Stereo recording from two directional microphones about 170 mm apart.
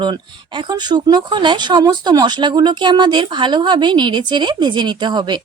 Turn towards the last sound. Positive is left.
turn(degrees=-25)  # may be behind; listen again after turning